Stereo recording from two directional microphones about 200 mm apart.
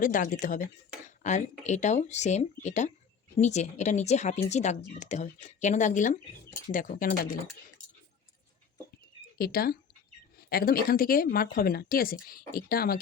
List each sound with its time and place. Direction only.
0.0 s speech: 40° left (ahead or behind)
9.4 s speech: 50° left (ahead or behind)